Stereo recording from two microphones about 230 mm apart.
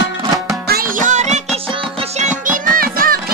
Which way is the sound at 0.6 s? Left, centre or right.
Right.